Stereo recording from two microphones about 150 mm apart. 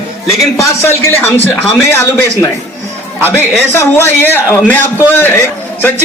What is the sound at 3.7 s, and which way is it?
A man's voice, 15° left (ahead or behind).